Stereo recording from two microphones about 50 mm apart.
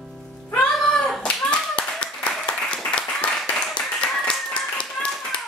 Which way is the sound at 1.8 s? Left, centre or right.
Left.